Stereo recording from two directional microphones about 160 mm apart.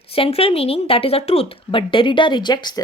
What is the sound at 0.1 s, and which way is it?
Speech, 40° left (ahead or behind).